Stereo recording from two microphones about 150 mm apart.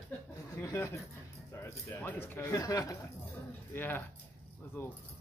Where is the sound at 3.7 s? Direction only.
10° left (ahead or behind).